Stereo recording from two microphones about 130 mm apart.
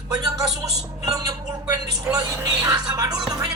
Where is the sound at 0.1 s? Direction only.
25° right (ahead or behind).